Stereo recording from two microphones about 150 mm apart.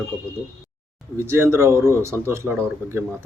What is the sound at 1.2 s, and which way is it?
Speech, 15° right (ahead or behind).